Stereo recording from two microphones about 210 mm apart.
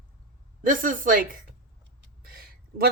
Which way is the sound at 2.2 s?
45° right (ahead or behind).